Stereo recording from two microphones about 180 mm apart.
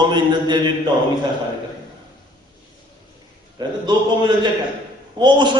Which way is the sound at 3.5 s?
25° right (ahead or behind).